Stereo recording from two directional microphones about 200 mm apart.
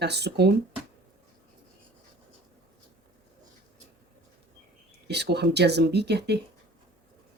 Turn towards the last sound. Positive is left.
turn(degrees=-55)  # may be behind; listen again after turning